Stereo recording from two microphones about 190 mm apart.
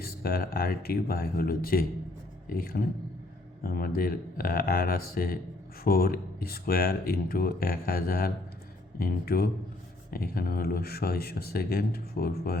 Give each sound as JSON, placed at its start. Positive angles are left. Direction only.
{"t": 0.0, "sound": "speech", "side_deg": 55}